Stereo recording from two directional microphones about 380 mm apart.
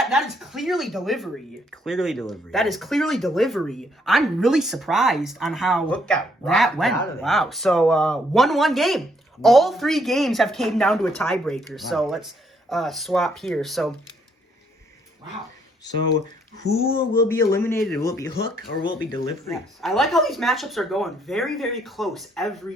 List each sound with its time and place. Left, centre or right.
0.0 s a sound: centre
1.8 s speech: centre
16.6 s speech: centre
19.8 s speech: centre